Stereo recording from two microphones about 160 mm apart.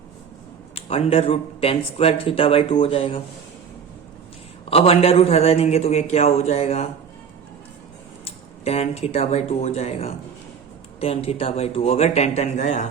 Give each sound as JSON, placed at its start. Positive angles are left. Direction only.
{"t": 0.8, "sound": "speech", "side_deg": 35}
{"t": 4.7, "sound": "speech", "side_deg": 40}
{"t": 8.2, "sound": "speech", "side_deg": 40}